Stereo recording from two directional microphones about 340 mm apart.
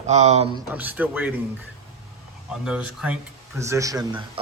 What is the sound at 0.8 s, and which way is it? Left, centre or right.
Speech, centre.